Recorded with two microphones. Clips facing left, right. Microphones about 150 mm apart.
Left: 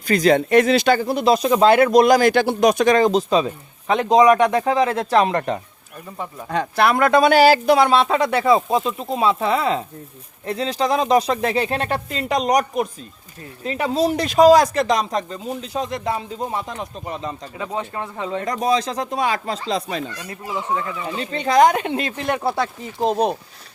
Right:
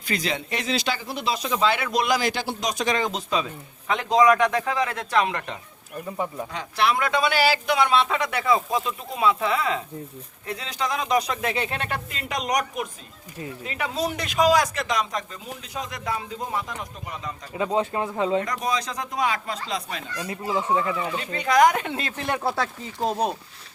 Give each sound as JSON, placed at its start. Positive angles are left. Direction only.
{"t": 0.1, "sound": "speech", "side_deg": 45}
{"t": 6.5, "sound": "speech", "side_deg": 55}
{"t": 17.6, "sound": "speech", "side_deg": -20}
{"t": 18.0, "sound": "speech", "side_deg": -5}
{"t": 18.4, "sound": "speech", "side_deg": 30}
{"t": 21.2, "sound": "speech", "side_deg": 30}